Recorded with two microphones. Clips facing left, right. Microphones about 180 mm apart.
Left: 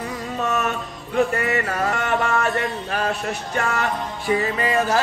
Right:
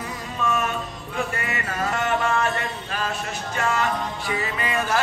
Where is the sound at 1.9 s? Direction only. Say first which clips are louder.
Right 3 dB; 60° left (ahead or behind).